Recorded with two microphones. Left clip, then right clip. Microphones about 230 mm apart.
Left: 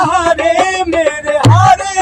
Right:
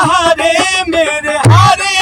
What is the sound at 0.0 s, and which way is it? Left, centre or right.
Music, right.